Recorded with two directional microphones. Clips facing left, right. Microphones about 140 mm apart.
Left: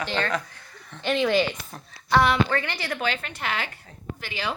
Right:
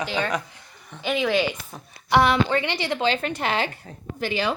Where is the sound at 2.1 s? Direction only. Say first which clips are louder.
Right 2 dB; 20° right (ahead or behind).